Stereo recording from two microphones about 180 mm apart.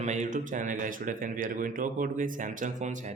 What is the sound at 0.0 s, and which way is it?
A man's voice, 40° right (ahead or behind).